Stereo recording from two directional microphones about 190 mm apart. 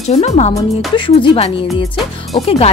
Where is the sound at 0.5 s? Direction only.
25° left (ahead or behind).